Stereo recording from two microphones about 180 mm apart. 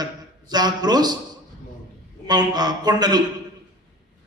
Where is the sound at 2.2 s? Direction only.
20° right (ahead or behind).